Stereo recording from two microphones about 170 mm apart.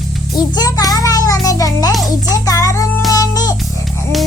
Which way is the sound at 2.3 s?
20° left (ahead or behind).